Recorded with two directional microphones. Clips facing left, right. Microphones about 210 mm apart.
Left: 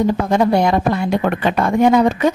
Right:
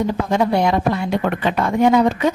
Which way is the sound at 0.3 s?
45° left (ahead or behind).